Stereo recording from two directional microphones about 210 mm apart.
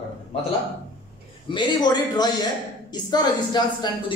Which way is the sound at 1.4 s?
20° left (ahead or behind).